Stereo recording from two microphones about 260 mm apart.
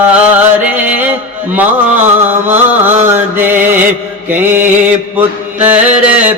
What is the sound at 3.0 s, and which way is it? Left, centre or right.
Music, centre.